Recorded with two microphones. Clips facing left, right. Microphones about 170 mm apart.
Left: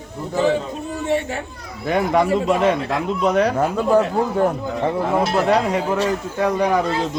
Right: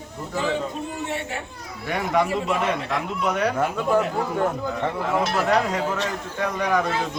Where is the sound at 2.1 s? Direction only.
30° left (ahead or behind).